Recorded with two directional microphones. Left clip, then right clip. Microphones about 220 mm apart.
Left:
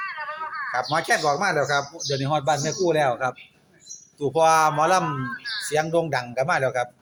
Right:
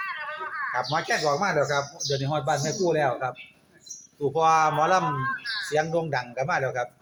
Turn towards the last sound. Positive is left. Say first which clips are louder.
# left 4 dB
turn(degrees=55)  # may be behind; listen again after turning